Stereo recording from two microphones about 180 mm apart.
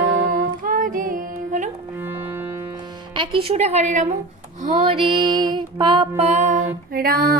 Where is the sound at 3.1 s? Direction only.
30° right (ahead or behind).